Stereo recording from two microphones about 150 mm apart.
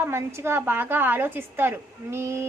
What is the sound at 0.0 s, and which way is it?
A woman's voice, 15° right (ahead or behind).